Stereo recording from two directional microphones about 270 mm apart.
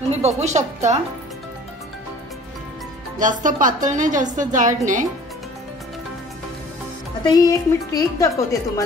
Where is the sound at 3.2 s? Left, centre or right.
Right.